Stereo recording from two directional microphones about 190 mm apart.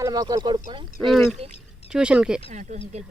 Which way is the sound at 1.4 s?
30° right (ahead or behind).